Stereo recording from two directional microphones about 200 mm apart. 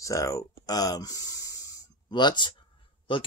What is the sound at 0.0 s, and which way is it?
Speech, 15° left (ahead or behind).